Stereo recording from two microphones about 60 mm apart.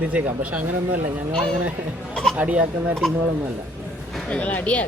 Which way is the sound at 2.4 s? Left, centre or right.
Right.